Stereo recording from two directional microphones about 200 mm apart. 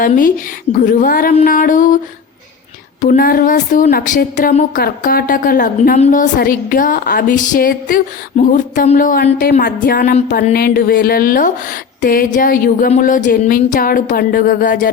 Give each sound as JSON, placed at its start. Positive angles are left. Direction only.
{"t": 0.0, "sound": "a woman's voice", "side_deg": 45}
{"t": 3.0, "sound": "a woman's voice", "side_deg": 40}